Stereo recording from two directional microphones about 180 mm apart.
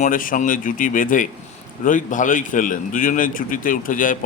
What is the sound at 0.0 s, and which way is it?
Speech, 50° left (ahead or behind).